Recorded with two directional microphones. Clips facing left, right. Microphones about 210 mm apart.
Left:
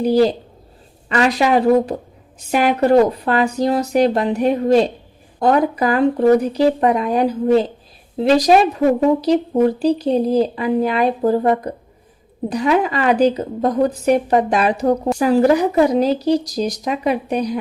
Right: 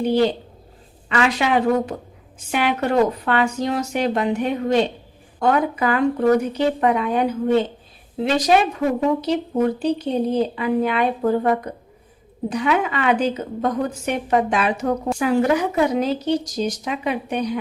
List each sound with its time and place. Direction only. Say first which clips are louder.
0.0 s speech: left 4 dB; 35° left (ahead or behind)